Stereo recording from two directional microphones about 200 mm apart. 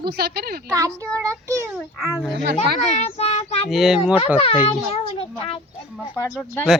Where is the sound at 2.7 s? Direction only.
30° left (ahead or behind).